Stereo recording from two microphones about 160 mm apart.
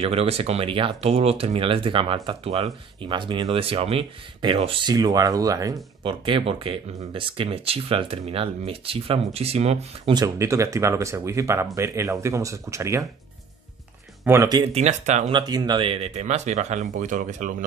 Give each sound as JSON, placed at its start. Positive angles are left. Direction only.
{"t": 0.0, "sound": "speech", "side_deg": -40}
{"t": 4.9, "sound": "speech", "side_deg": -25}
{"t": 10.1, "sound": "speech", "side_deg": -20}
{"t": 14.2, "sound": "speech", "side_deg": -15}
{"t": 14.7, "sound": "speech", "side_deg": -45}
{"t": 15.3, "sound": "speech", "side_deg": -25}